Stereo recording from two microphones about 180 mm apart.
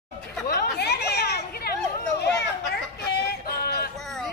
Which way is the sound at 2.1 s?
65° left (ahead or behind).